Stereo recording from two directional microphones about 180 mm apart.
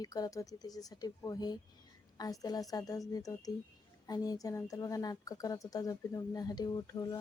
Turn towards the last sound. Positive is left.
turn(degrees=20)  # may be behind; listen again after turning